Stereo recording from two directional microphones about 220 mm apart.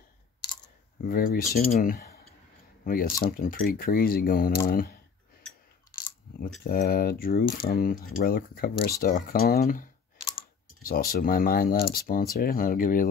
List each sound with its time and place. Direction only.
1.0 s speech: 40° left (ahead or behind)
6.6 s speech: 40° left (ahead or behind)